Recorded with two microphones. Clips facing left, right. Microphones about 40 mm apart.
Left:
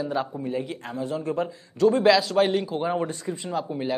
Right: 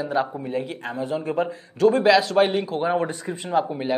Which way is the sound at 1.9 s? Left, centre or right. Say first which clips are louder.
Right 1 dB; centre.